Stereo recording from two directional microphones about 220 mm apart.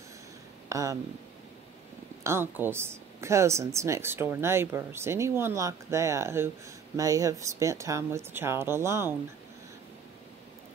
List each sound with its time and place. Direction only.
0.7 s speech: 15° right (ahead or behind)
2.2 s speech: 10° right (ahead or behind)